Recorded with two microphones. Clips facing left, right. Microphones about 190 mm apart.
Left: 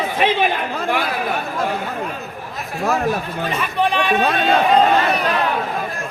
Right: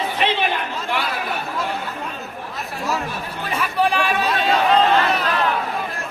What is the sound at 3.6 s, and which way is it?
Chatter, 5° right (ahead or behind).